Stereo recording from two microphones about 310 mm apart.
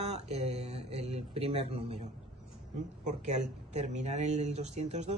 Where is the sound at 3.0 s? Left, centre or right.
Right.